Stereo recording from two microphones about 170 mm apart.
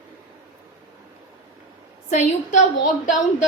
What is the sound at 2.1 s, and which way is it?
Speech, 45° left (ahead or behind).